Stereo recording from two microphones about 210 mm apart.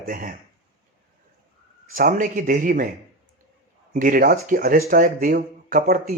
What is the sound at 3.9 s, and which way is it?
Speech, 40° right (ahead or behind).